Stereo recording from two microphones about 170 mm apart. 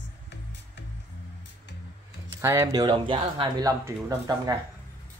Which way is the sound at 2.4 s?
20° right (ahead or behind).